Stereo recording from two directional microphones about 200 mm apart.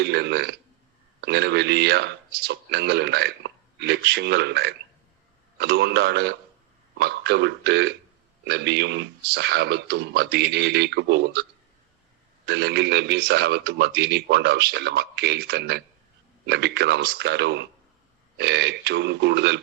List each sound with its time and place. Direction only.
0.0 s a man's voice: 55° right (ahead or behind)
12.5 s a man's voice: 55° right (ahead or behind)